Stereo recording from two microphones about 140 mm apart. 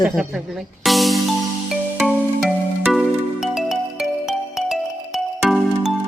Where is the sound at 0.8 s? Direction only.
Centre (ahead or behind).